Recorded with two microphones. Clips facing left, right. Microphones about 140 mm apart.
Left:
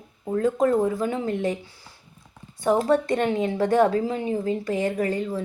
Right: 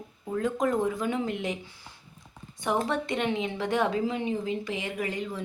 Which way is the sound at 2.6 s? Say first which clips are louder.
Left 7 dB; 35° left (ahead or behind).